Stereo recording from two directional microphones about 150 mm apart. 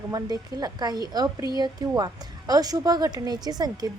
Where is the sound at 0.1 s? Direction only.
25° right (ahead or behind).